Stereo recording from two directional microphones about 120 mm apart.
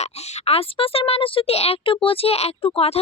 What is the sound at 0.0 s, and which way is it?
A woman's voice, 55° left (ahead or behind).